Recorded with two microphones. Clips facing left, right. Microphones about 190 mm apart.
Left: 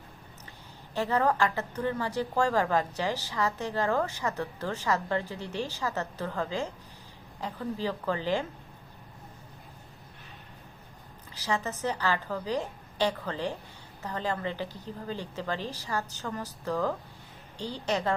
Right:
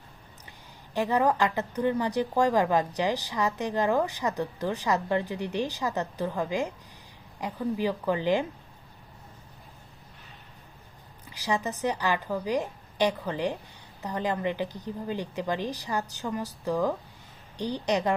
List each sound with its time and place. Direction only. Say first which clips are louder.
0.9 s speech: right 2 dB; 15° right (ahead or behind)
11.3 s a sound: right 2 dB; 15° right (ahead or behind)
11.8 s speech: right 2 dB; 15° right (ahead or behind)